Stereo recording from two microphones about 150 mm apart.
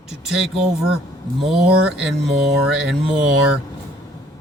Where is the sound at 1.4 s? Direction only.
5° right (ahead or behind).